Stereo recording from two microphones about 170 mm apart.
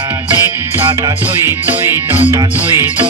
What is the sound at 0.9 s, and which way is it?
Music, 15° right (ahead or behind).